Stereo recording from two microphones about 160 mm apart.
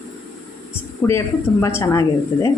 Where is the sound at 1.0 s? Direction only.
10° left (ahead or behind).